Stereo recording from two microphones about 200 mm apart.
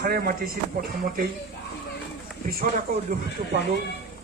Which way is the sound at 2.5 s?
45° right (ahead or behind).